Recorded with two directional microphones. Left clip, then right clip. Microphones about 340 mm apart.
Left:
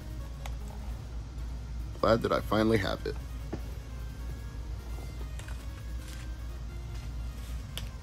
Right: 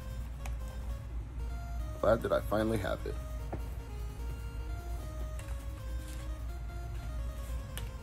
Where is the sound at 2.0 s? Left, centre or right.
Centre.